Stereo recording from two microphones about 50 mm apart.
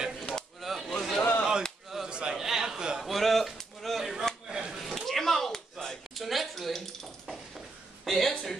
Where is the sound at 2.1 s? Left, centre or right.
Centre.